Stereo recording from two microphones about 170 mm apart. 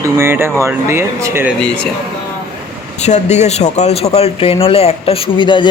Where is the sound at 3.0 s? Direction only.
40° left (ahead or behind).